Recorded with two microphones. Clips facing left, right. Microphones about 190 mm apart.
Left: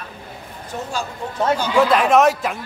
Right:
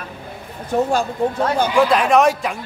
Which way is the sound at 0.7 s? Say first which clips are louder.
Right 11 dB; 60° right (ahead or behind).